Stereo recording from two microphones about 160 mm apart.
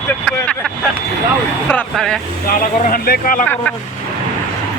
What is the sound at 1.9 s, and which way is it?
Speech, centre (ahead or behind).